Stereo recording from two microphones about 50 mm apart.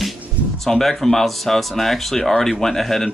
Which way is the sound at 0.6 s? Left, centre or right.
Centre.